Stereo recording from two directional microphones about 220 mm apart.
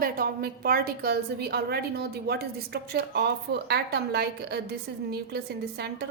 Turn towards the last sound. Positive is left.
turn(degrees=-50)  # may be behind; listen again after turning